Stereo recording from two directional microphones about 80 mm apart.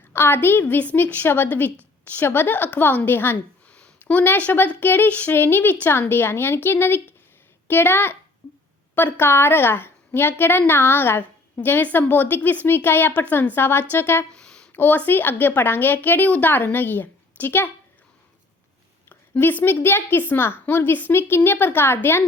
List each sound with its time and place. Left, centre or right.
0.1 s a woman's voice: left
14.3 s a sound: centre
14.7 s a woman's voice: left
19.0 s a woman's voice: left